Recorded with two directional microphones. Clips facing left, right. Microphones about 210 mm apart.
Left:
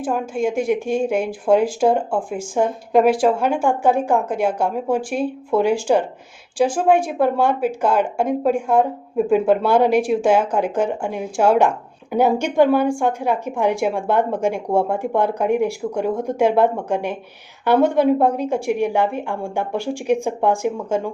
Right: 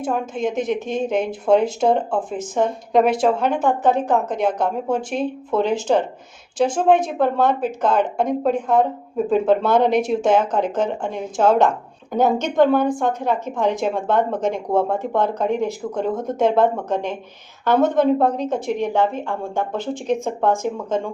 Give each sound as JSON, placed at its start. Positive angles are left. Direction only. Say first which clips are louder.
{"t": 0.0, "sound": "a woman's voice", "louder": "left 1 dB", "side_deg": 5}